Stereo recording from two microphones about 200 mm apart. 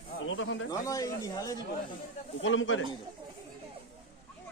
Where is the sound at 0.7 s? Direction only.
15° left (ahead or behind).